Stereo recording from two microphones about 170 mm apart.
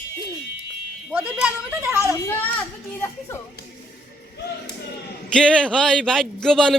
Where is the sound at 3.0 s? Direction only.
15° left (ahead or behind).